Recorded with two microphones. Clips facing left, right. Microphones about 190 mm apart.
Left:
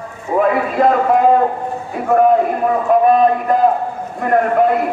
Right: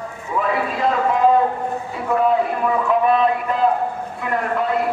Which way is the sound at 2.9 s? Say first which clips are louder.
Left 6 dB; 45° left (ahead or behind).